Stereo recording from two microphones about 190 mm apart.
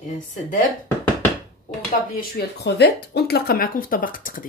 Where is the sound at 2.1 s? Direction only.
55° left (ahead or behind).